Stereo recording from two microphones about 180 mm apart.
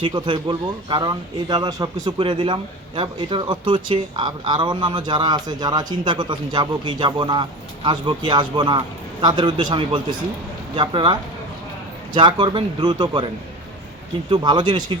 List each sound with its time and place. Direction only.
0.0 s speech: 25° right (ahead or behind)
14.3 s speech: 25° right (ahead or behind)